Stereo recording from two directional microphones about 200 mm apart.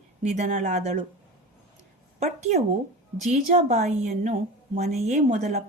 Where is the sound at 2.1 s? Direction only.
35° right (ahead or behind).